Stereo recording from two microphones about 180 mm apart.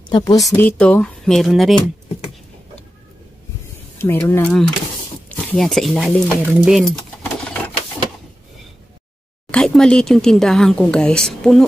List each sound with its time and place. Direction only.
0.1 s speech: 20° left (ahead or behind)
0.6 s speech: 5° left (ahead or behind)
4.0 s speech: 10° left (ahead or behind)
9.5 s speech: 5° left (ahead or behind)